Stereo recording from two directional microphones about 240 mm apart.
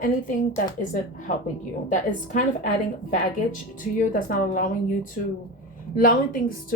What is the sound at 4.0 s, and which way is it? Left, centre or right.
Speech, left.